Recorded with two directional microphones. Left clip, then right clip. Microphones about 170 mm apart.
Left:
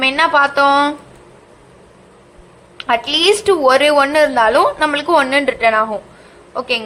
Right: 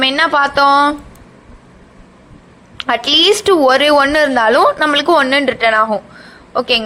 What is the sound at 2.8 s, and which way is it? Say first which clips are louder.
A woman's voice: right 3 dB; 30° right (ahead or behind).